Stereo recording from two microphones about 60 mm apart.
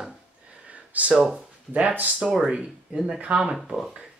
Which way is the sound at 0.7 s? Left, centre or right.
Right.